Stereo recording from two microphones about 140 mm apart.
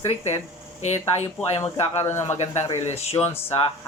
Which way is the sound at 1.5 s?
40° left (ahead or behind).